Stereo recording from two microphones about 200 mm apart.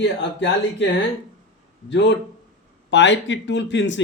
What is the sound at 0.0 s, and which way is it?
Speech, 60° left (ahead or behind).